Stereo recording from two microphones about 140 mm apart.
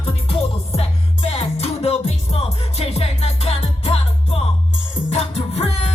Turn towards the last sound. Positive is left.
turn(degrees=45)  # may be behind; listen again after turning